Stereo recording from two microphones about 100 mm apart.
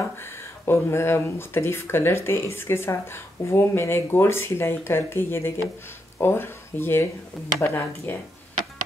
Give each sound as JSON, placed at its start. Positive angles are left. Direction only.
{"t": 0.7, "sound": "speech", "side_deg": 25}